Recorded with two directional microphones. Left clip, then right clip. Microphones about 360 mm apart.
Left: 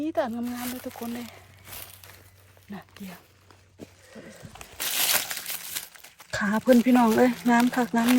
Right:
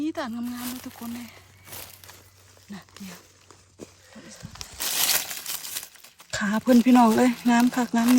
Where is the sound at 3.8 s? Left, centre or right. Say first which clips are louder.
Right 2 dB; right.